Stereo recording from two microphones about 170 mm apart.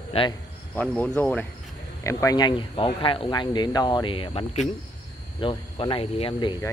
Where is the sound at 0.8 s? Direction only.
10° left (ahead or behind).